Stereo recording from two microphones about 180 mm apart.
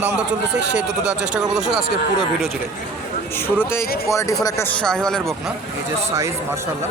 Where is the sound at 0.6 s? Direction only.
75° right (ahead or behind).